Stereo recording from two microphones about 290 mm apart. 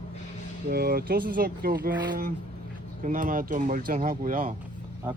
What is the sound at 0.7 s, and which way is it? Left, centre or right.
Speech, right.